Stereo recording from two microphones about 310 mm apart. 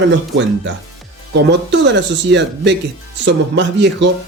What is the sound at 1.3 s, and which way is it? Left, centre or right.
Speech, right.